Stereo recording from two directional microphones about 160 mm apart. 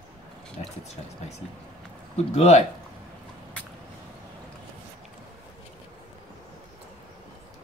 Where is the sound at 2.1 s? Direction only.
40° left (ahead or behind).